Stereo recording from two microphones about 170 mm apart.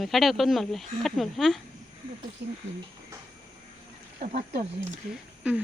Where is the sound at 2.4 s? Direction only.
75° right (ahead or behind).